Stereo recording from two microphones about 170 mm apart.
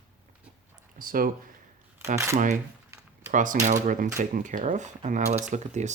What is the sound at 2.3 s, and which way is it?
Speech, 45° right (ahead or behind).